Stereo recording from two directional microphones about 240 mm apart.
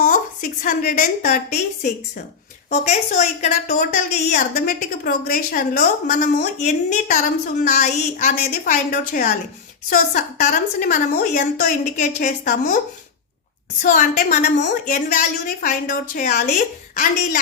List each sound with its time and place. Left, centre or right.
0.6 s a woman's voice: left
13.8 s a woman's voice: left